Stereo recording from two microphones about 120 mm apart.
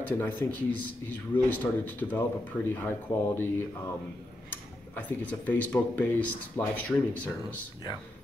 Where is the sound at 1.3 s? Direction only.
15° left (ahead or behind).